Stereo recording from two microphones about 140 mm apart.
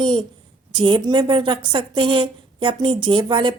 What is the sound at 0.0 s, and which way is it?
A woman's voice, 35° right (ahead or behind).